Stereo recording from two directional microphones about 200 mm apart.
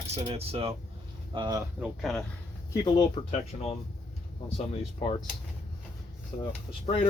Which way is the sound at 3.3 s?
30° left (ahead or behind).